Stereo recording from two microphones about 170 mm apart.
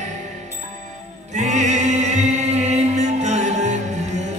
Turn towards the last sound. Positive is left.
turn(degrees=-45)  # may be behind; listen again after turning